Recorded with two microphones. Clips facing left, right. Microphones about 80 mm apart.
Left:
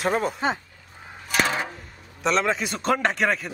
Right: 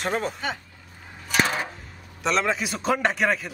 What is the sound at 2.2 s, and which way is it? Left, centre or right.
A man's voice, centre.